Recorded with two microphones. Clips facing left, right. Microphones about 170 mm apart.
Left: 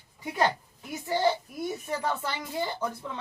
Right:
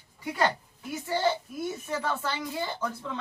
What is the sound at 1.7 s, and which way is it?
Speech, 15° left (ahead or behind).